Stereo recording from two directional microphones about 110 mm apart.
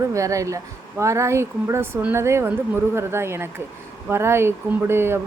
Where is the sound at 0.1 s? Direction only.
30° right (ahead or behind).